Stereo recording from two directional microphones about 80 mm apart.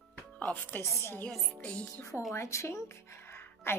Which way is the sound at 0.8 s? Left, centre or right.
Left.